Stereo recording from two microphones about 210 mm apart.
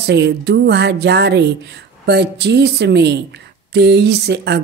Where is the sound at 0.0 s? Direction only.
55° right (ahead or behind).